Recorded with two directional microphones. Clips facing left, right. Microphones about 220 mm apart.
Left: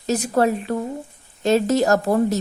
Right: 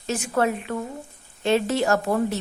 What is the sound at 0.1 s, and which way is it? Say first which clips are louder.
A woman's voice: left 4 dB; 35° left (ahead or behind).